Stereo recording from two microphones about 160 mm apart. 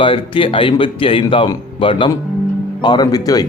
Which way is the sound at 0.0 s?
30° left (ahead or behind).